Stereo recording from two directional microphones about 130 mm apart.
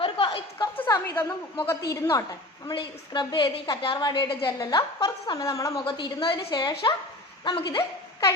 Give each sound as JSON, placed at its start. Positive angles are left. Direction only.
{"t": 0.0, "sound": "a sound", "side_deg": 40}
{"t": 0.9, "sound": "a woman's voice", "side_deg": 20}
{"t": 4.4, "sound": "a woman's voice", "side_deg": 30}
{"t": 5.7, "sound": "a woman's voice", "side_deg": 35}